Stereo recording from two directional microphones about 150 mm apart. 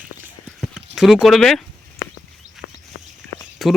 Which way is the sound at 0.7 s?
Centre (ahead or behind).